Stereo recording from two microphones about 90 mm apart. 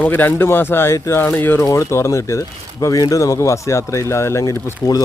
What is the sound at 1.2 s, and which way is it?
Speech, 20° left (ahead or behind).